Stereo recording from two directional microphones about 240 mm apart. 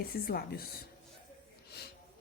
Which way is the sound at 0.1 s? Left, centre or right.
Left.